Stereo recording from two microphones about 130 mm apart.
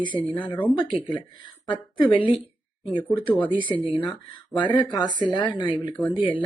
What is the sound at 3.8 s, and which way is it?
Speech, 40° left (ahead or behind).